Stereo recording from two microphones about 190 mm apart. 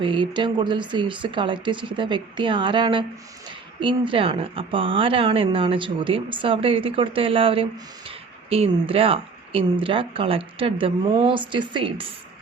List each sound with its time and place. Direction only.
0.0 s a woman's voice: 25° right (ahead or behind)